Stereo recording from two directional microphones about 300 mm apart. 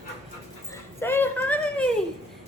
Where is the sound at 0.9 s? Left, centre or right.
Centre.